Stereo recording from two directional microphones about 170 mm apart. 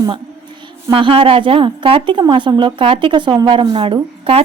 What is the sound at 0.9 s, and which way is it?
A woman's voice, 30° right (ahead or behind).